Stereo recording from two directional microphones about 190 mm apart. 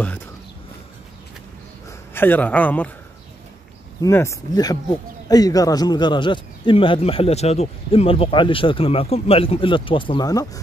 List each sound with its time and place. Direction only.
1.9 s a man's voice: 10° left (ahead or behind)
4.0 s a man's voice: 15° left (ahead or behind)